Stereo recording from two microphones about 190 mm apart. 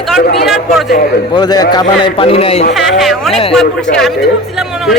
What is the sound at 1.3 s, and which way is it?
A man's voice, 20° left (ahead or behind).